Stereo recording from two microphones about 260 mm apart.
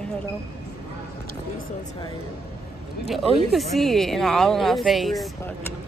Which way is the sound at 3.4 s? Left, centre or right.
Centre.